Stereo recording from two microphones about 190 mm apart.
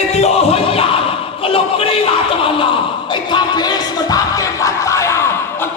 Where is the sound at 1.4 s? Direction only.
30° left (ahead or behind).